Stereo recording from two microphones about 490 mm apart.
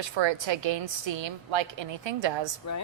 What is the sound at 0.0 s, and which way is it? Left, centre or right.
A woman's voice, right.